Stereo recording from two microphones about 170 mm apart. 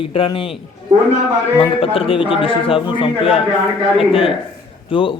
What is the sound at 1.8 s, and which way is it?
A man's voice, 35° left (ahead or behind).